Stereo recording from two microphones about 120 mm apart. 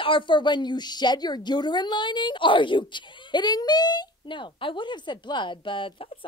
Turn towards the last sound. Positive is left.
turn(degrees=45)  # may be behind; listen again after turning